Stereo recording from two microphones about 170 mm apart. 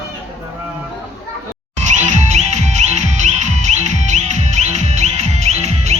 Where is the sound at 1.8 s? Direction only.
40° right (ahead or behind).